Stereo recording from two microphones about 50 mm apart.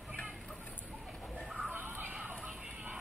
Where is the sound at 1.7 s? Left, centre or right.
Right.